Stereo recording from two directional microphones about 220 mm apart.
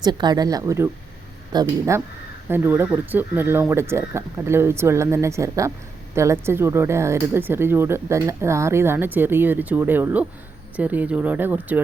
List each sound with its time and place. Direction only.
0.0 s speech: 20° right (ahead or behind)